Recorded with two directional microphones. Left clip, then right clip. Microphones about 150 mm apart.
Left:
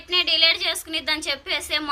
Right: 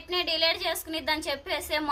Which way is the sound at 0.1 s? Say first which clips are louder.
Left 7 dB; 35° right (ahead or behind).